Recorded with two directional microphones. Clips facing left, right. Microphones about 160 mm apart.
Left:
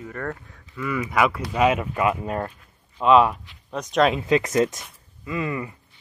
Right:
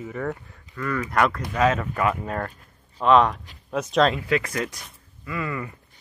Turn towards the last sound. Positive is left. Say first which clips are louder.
# left 2 dB
turn(degrees=20)  # may be behind; listen again after turning